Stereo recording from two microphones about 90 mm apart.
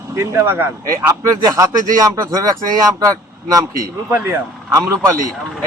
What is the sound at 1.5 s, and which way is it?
A man's voice, 40° right (ahead or behind).